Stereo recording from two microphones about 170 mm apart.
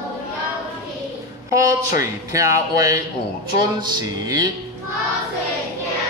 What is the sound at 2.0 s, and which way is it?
Speech, 20° right (ahead or behind).